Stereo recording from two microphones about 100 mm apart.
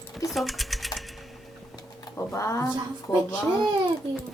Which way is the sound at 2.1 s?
30° left (ahead or behind).